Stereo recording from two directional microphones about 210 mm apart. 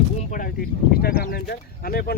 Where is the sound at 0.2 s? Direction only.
35° left (ahead or behind).